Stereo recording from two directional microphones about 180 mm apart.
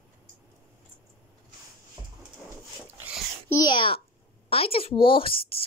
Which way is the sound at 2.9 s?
5° right (ahead or behind).